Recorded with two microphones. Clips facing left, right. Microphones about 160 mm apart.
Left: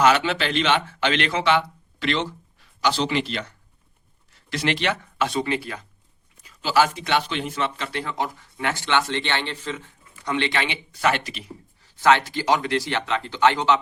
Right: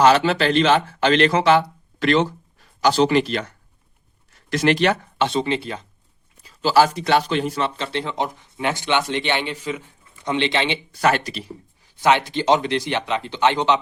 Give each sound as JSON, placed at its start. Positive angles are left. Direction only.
{"t": 0.0, "sound": "speech", "side_deg": -35}
{"t": 5.1, "sound": "speech", "side_deg": -25}
{"t": 6.4, "sound": "speech", "side_deg": -35}
{"t": 11.0, "sound": "speech", "side_deg": -40}
{"t": 11.8, "sound": "speech", "side_deg": -15}